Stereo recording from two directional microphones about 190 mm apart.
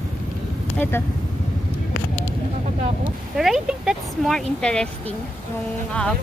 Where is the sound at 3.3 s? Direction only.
Centre (ahead or behind).